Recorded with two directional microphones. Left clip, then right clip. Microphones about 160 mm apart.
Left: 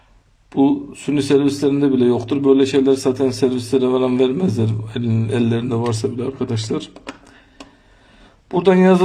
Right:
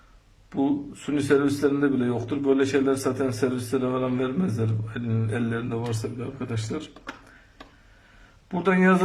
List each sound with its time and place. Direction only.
0.5 s a man's voice: 20° left (ahead or behind)
8.4 s a man's voice: 30° left (ahead or behind)